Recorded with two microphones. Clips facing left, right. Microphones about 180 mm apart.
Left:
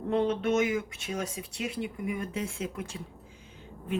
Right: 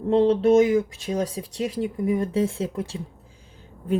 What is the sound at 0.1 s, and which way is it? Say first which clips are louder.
A woman's voice: right 9 dB; 30° right (ahead or behind).